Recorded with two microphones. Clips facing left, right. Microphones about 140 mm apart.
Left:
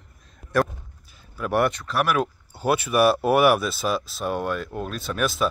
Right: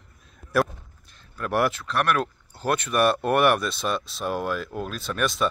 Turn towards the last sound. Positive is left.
turn(degrees=0)  # may be behind; listen again after turning